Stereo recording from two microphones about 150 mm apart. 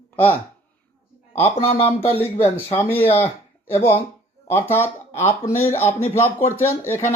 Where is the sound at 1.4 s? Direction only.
40° left (ahead or behind).